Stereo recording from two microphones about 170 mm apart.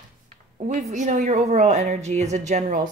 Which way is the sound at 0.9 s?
45° right (ahead or behind).